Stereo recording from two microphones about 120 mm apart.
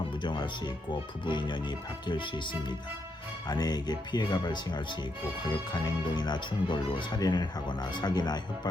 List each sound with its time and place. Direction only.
0.2 s speech: 40° left (ahead or behind)